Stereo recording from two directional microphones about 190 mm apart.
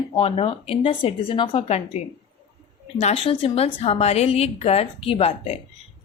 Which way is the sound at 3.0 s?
35° left (ahead or behind).